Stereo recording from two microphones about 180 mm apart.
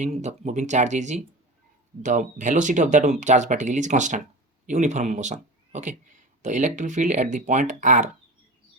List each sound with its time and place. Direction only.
0.0 s speech: 40° right (ahead or behind)